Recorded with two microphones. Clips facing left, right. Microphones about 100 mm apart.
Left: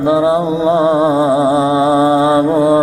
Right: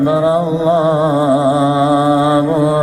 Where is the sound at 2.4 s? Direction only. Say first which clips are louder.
Left 2 dB; 15° left (ahead or behind).